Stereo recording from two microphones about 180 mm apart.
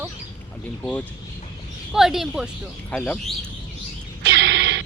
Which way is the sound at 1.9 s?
Centre (ahead or behind).